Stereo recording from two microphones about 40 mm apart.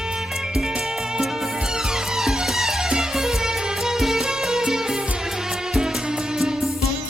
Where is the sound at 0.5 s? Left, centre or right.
Centre.